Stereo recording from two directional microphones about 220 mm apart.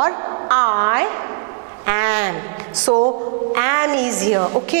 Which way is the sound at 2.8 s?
30° right (ahead or behind).